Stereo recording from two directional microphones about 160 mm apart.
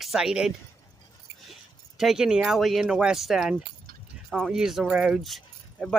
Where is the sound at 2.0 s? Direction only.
5° right (ahead or behind).